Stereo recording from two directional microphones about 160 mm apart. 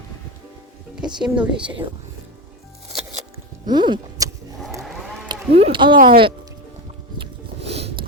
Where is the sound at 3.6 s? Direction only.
30° right (ahead or behind).